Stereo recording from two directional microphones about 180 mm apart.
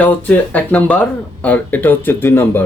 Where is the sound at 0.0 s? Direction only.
10° left (ahead or behind).